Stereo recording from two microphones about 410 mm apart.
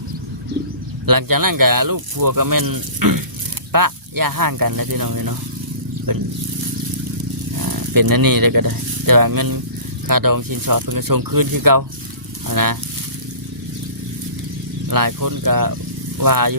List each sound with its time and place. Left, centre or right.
1.0 s speech: right
7.6 s speech: right
14.8 s speech: right